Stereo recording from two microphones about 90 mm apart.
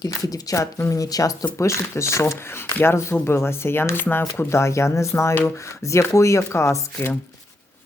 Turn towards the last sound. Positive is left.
turn(degrees=20)  # may be behind; listen again after turning